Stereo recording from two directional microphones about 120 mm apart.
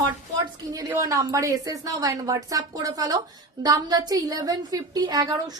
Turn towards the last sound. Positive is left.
turn(degrees=-30)  # may be behind; listen again after turning